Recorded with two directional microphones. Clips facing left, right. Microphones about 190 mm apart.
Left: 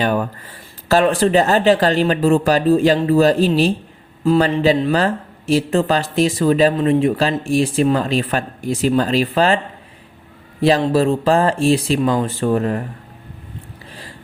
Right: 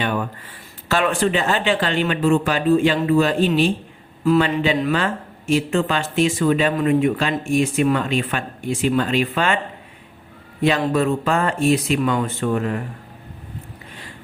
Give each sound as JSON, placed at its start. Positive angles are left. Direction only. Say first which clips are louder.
{"t": 0.0, "sound": "speech", "louder": "left 5 dB", "side_deg": 40}
{"t": 10.6, "sound": "speech", "louder": "left 4 dB", "side_deg": 35}